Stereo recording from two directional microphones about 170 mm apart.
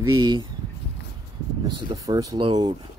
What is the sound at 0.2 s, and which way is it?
Chopping, 25° right (ahead or behind).